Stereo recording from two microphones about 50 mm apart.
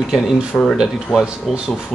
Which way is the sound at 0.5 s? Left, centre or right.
Left.